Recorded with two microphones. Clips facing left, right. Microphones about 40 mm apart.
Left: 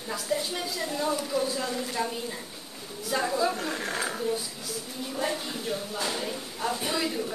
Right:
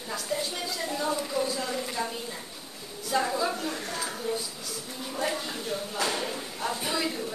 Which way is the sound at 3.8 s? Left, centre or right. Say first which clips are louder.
Left 3 dB; left.